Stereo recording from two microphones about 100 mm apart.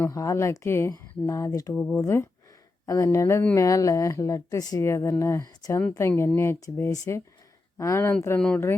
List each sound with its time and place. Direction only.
0.0 s speech: 35° left (ahead or behind)
1.7 s speech: 10° left (ahead or behind)
2.0 s speech: 25° left (ahead or behind)
8.4 s speech: 10° left (ahead or behind)